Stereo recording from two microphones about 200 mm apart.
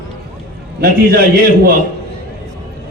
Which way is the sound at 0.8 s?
50° right (ahead or behind).